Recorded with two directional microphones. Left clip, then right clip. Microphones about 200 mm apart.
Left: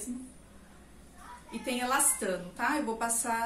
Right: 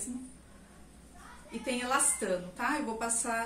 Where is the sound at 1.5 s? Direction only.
10° left (ahead or behind).